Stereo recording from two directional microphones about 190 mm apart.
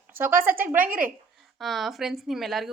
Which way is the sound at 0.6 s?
10° right (ahead or behind).